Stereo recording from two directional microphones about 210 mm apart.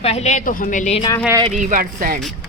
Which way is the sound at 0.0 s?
30° left (ahead or behind).